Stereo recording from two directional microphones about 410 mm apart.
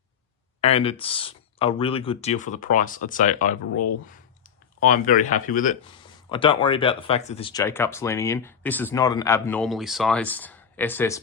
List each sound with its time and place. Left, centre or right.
0.6 s speech: centre